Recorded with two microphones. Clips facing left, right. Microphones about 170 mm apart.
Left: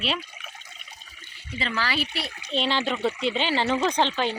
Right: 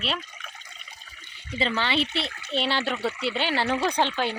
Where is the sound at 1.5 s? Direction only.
30° right (ahead or behind).